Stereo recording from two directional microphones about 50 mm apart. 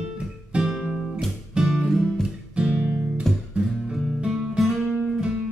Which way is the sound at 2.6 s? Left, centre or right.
Centre.